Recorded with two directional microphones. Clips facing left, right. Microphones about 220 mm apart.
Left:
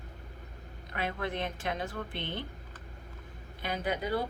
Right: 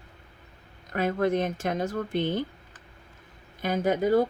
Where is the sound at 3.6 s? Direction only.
45° right (ahead or behind).